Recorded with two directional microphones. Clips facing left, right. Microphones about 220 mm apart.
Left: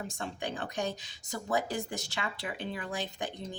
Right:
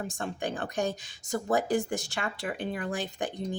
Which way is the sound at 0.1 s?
50° right (ahead or behind).